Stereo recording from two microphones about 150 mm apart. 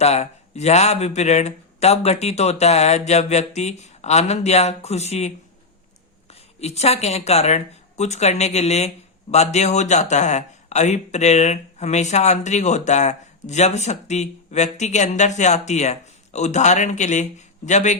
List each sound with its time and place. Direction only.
0.0 s a man's voice: 45° left (ahead or behind)